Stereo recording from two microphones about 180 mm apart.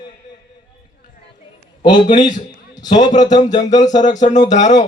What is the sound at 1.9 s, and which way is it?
Speech, 25° left (ahead or behind).